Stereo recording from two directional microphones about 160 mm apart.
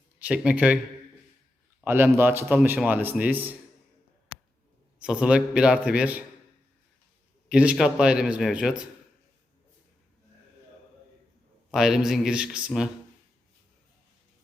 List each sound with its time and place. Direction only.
0.2 s a man's voice: 10° right (ahead or behind)
1.8 s a man's voice: 15° right (ahead or behind)
4.9 s a man's voice: 5° right (ahead or behind)
7.4 s speech: 5° right (ahead or behind)
11.7 s speech: centre (ahead or behind)